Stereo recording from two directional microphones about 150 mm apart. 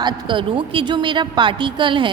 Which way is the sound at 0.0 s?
35° right (ahead or behind).